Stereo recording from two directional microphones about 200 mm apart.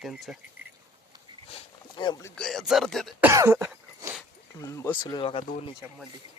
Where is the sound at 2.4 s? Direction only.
Centre (ahead or behind).